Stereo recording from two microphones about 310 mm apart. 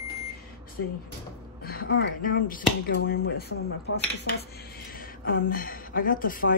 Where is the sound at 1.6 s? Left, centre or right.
Left.